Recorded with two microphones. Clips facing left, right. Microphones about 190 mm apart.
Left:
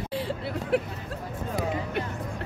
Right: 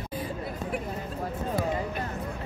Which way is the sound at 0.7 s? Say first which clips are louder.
Left 9 dB; 80° left.